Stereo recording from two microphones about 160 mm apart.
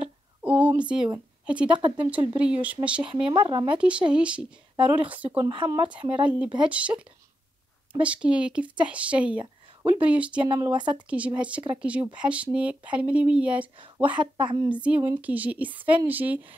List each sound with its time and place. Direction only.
0.0 s a sound: 10° right (ahead or behind)
1.4 s a woman's voice: 5° right (ahead or behind)
1.8 s speech: 30° right (ahead or behind)
2.0 s speech: 10° right (ahead or behind)
3.3 s speech: 30° right (ahead or behind)
3.8 s speech: 5° right (ahead or behind)
5.4 s speech: 30° right (ahead or behind)
6.1 s speech: 5° right (ahead or behind)
10.5 s speech: 25° right (ahead or behind)
11.1 s speech: 10° right (ahead or behind)
14.2 s speech: 30° right (ahead or behind)
14.7 s speech: 10° right (ahead or behind)